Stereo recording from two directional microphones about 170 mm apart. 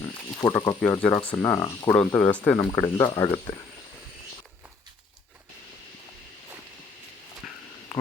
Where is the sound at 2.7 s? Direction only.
20° left (ahead or behind).